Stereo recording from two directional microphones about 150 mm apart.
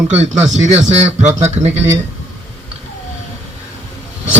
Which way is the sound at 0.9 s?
50° right (ahead or behind).